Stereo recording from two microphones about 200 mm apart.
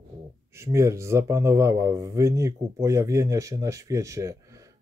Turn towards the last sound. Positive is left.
turn(degrees=-15)  # may be behind; listen again after turning